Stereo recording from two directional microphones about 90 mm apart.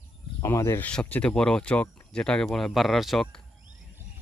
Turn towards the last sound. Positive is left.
turn(degrees=0)  # may be behind; listen again after turning